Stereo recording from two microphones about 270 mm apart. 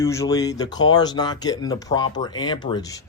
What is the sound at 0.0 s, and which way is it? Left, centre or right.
Speech, centre.